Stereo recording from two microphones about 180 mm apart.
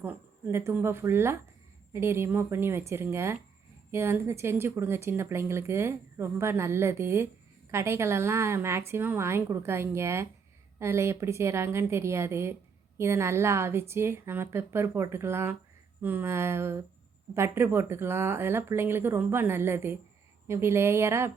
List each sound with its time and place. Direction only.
0.0 s a woman's voice: 10° right (ahead or behind)